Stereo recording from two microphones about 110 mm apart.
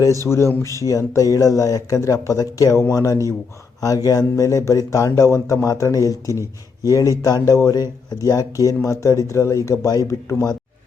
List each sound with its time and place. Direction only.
0.3 s speech: 25° left (ahead or behind)